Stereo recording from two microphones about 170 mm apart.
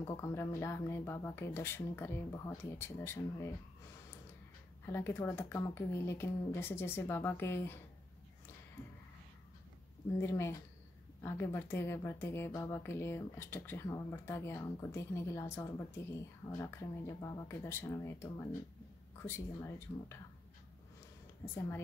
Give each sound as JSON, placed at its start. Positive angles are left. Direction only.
{"t": 0.0, "sound": "speech", "side_deg": 15}
{"t": 4.8, "sound": "speech", "side_deg": 15}
{"t": 10.1, "sound": "speech", "side_deg": 15}